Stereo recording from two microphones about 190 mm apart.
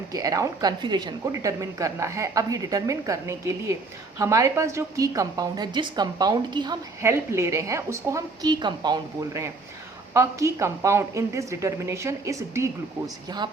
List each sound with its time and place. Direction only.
0.1 s a woman's voice: 20° right (ahead or behind)